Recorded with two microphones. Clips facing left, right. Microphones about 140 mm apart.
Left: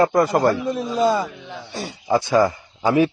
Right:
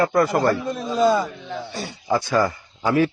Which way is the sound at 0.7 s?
5° left (ahead or behind).